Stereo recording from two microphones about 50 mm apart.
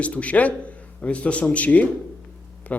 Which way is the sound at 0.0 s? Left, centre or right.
Left.